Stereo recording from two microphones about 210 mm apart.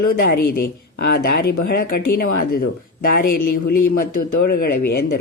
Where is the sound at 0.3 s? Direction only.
45° left (ahead or behind).